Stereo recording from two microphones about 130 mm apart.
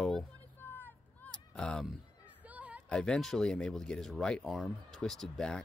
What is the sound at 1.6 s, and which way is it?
Speech, 5° left (ahead or behind).